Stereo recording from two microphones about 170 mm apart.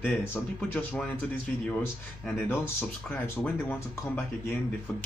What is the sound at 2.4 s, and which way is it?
Speech, 10° left (ahead or behind).